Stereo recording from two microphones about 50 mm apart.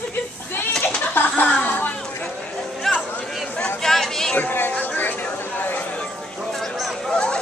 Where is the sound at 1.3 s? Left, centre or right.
Left.